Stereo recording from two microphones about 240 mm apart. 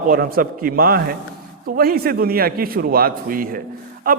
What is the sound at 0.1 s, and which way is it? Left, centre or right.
A man's voice, right.